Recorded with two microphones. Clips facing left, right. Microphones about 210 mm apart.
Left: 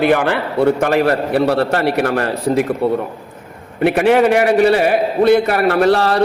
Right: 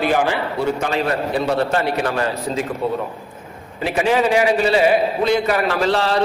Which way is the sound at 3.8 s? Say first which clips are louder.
Left 6 dB; 60° left (ahead or behind).